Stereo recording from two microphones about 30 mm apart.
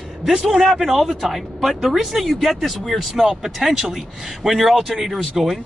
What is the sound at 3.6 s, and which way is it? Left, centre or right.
Speech, centre.